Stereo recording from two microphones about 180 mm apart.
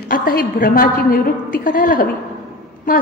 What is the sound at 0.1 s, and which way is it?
A woman's voice, 55° left (ahead or behind).